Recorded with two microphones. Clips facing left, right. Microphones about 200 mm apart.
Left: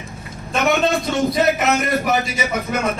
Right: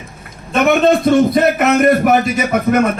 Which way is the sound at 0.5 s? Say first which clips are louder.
Right 6 dB; 55° right (ahead or behind).